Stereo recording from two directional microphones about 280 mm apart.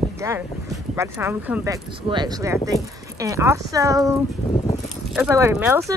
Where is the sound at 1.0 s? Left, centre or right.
Centre.